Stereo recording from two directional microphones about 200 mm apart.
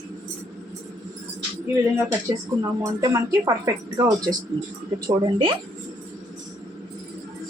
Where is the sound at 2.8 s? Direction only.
15° right (ahead or behind).